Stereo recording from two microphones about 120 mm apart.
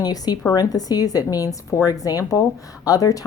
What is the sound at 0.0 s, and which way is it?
A woman's voice, 35° left (ahead or behind).